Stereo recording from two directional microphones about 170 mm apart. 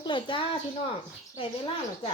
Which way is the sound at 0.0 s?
30° left (ahead or behind).